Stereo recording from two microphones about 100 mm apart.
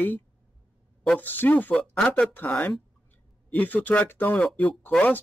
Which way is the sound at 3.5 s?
15° left (ahead or behind).